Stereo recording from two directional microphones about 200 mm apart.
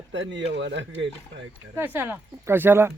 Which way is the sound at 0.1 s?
65° right (ahead or behind).